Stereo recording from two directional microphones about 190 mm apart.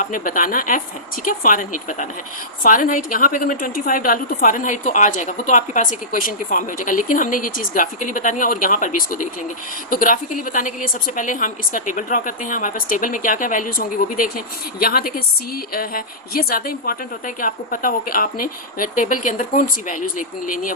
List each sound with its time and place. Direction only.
0.0 s a woman's voice: 45° left (ahead or behind)